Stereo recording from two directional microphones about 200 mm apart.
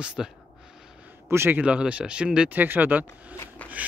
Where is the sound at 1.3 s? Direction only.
10° right (ahead or behind).